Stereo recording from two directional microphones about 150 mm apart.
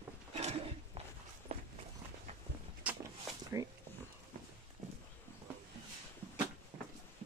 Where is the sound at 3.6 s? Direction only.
20° right (ahead or behind).